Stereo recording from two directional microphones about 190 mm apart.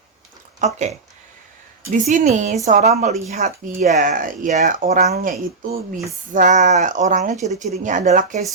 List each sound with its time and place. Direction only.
0.6 s speech: 40° right (ahead or behind)
1.9 s speech: 40° right (ahead or behind)